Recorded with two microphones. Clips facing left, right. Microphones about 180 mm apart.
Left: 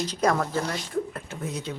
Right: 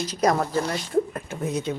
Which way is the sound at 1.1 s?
20° right (ahead or behind).